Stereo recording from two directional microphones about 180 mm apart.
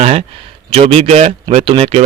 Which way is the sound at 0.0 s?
35° right (ahead or behind).